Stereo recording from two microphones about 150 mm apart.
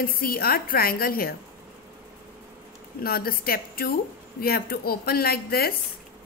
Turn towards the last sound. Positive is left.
turn(degrees=90)